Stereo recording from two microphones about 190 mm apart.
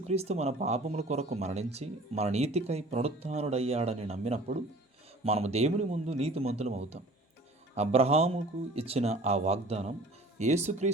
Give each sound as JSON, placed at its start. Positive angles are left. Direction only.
{"t": 0.1, "sound": "speech", "side_deg": -35}